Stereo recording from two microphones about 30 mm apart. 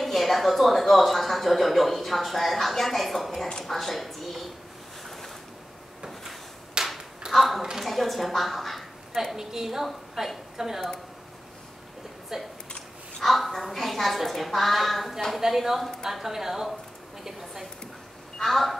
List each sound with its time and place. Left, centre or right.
0.0 s speech: centre
6.8 s a sound: centre
7.8 s a woman's voice: centre
12.3 s a woman's voice: centre
13.2 s a woman's voice: centre
18.4 s speech: centre